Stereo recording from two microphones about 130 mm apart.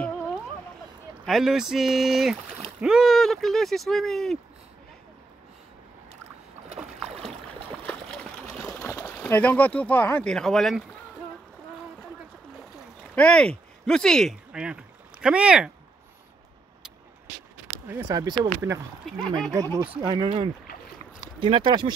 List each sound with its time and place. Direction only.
1.2 s speech: centre (ahead or behind)
7.8 s water: 5° left (ahead or behind)
8.8 s a sound: 20° left (ahead or behind)
9.2 s speech: 10° left (ahead or behind)
13.1 s speech: 10° left (ahead or behind)
14.5 s speech: 5° right (ahead or behind)
17.8 s speech: 25° right (ahead or behind)
19.0 s speech: 5° left (ahead or behind)
19.5 s speech: 25° right (ahead or behind)
21.4 s speech: 40° right (ahead or behind)